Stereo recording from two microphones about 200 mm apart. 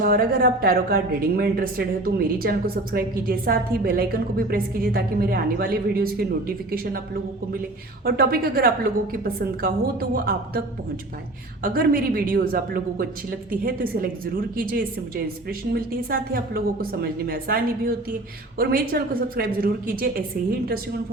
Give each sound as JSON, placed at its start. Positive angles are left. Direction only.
{"t": 0.0, "sound": "a woman's voice", "side_deg": -50}
{"t": 8.0, "sound": "a woman's voice", "side_deg": -50}
{"t": 11.6, "sound": "a woman's voice", "side_deg": -45}